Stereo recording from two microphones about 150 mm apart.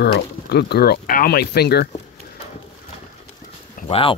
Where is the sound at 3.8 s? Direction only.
40° left (ahead or behind).